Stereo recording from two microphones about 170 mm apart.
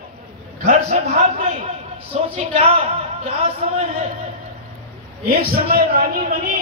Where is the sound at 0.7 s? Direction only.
40° right (ahead or behind).